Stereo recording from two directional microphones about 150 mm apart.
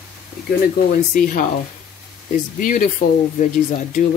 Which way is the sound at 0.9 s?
65° left (ahead or behind).